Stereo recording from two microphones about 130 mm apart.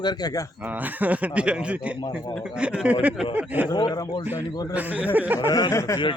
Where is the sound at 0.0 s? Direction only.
30° left (ahead or behind).